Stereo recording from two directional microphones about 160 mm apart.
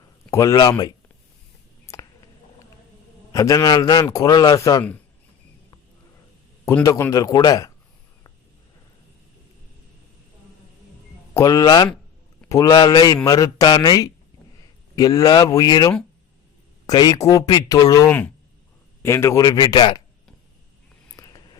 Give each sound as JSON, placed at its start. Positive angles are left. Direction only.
{"t": 0.3, "sound": "speech", "side_deg": 20}
{"t": 1.9, "sound": "a sound", "side_deg": 15}
{"t": 3.3, "sound": "speech", "side_deg": 20}
{"t": 6.7, "sound": "speech", "side_deg": 20}
{"t": 11.3, "sound": "speech", "side_deg": 20}
{"t": 21.2, "sound": "vehicle", "side_deg": 20}